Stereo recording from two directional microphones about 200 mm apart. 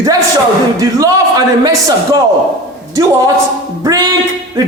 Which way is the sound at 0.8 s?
15° right (ahead or behind).